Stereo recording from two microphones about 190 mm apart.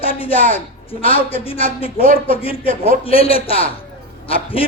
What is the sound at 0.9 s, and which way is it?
A man's voice, 30° left (ahead or behind).